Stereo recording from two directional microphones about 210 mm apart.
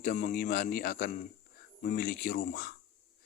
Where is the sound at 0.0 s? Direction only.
40° left (ahead or behind).